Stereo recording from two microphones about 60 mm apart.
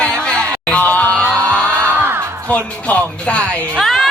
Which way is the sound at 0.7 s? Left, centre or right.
Left.